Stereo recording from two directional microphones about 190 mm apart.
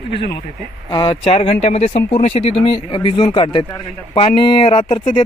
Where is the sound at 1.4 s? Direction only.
35° left (ahead or behind).